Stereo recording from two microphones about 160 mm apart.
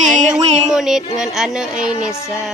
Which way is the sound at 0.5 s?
5° right (ahead or behind).